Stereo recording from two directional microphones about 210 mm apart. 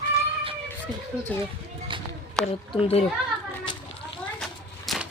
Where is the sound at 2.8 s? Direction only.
30° left (ahead or behind).